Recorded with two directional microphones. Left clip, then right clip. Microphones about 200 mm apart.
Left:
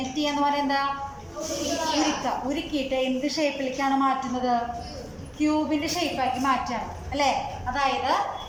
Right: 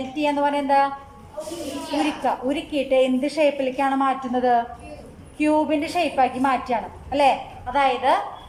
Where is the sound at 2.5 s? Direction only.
45° right (ahead or behind).